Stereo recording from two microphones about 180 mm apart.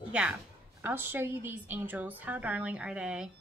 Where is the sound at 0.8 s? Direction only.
10° right (ahead or behind).